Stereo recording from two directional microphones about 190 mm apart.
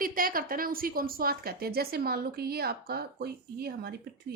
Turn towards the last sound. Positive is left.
turn(degrees=-55)  # may be behind; listen again after turning